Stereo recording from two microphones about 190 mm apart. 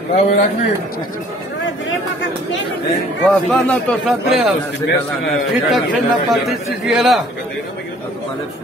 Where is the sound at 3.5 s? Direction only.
Centre (ahead or behind).